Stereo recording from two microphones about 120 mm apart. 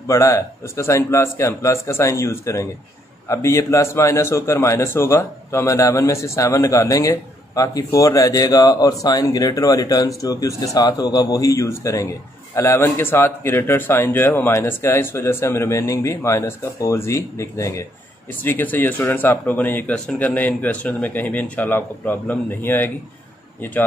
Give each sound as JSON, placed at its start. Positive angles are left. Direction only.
{"t": 0.0, "sound": "a man's voice", "side_deg": 25}